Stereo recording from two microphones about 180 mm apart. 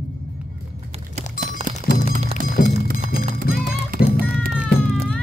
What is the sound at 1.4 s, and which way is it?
Music, 50° right (ahead or behind).